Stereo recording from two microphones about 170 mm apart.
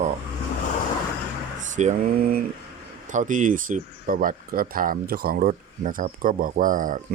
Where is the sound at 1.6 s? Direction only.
45° right (ahead or behind).